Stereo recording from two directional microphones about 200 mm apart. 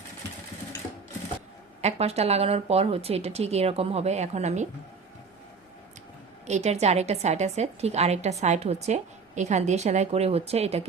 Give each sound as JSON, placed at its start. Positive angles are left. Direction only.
{"t": 1.8, "sound": "a woman's voice", "side_deg": -30}
{"t": 6.5, "sound": "a woman's voice", "side_deg": -35}